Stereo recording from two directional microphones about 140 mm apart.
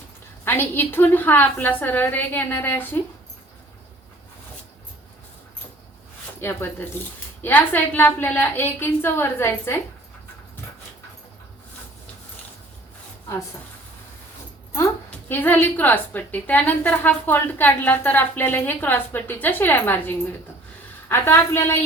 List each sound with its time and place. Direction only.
0.4 s a woman's voice: 15° left (ahead or behind)
6.4 s a woman's voice: 15° left (ahead or behind)
15.1 s a woman's voice: 15° left (ahead or behind)